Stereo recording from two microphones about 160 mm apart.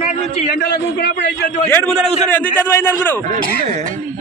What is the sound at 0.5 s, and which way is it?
Speech, 90° left.